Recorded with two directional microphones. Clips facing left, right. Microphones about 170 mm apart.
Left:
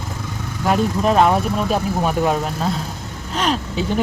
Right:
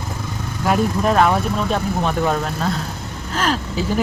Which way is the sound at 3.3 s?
Centre (ahead or behind).